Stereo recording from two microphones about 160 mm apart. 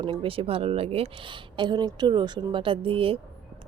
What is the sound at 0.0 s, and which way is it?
Speech, 35° right (ahead or behind).